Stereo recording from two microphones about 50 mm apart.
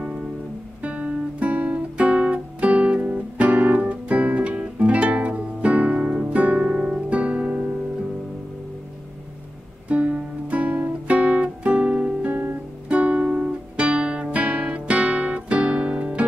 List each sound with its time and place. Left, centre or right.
0.8 s guitar: right
7.1 s music: right
9.8 s guitar: right
12.8 s music: right